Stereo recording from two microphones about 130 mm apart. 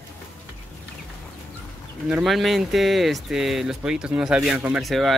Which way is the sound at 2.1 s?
Centre (ahead or behind).